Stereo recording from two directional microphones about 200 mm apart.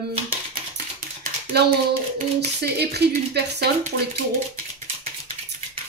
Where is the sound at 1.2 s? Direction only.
50° right (ahead or behind).